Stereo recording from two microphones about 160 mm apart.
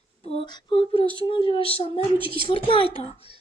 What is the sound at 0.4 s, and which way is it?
A woman's voice, 30° left (ahead or behind).